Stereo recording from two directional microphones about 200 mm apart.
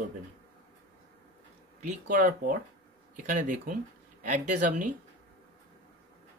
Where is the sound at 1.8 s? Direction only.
40° right (ahead or behind).